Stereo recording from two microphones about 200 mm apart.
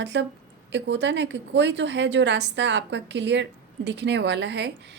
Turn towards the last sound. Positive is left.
turn(degrees=-60)  # may be behind; listen again after turning